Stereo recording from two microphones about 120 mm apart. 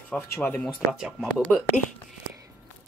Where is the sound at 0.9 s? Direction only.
5° right (ahead or behind).